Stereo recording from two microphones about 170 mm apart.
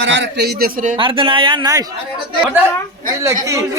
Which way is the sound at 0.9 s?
30° right (ahead or behind).